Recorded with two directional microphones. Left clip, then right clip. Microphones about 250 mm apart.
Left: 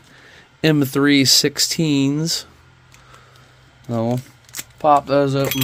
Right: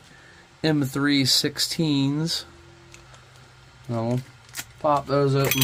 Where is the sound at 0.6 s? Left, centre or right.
Left.